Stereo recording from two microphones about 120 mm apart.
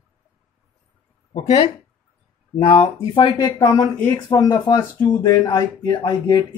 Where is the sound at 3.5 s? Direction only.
30° left (ahead or behind).